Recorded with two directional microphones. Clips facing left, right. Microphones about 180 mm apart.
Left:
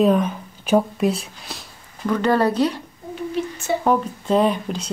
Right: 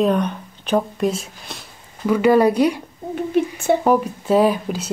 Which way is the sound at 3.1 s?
55° right (ahead or behind).